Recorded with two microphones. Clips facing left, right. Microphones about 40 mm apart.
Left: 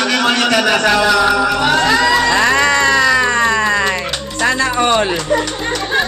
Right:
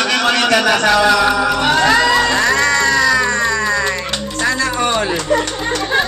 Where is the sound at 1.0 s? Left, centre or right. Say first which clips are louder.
Even; centre.